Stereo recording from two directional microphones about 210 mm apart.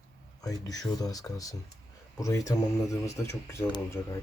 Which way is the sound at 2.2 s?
15° left (ahead or behind).